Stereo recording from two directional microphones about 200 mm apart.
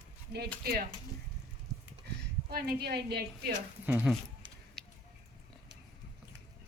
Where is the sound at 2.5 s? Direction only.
50° right (ahead or behind).